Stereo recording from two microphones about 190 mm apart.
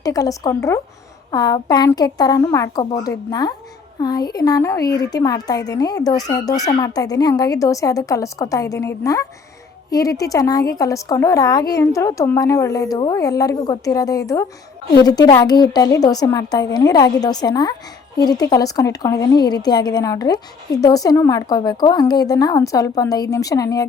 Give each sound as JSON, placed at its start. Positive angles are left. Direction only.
{"t": 0.0, "sound": "a woman's voice", "side_deg": 20}